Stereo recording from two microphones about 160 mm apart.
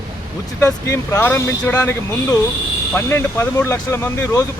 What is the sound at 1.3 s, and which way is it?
Speech, 10° left (ahead or behind).